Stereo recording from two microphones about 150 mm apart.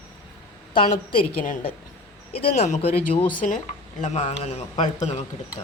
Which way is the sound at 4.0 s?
50° left (ahead or behind).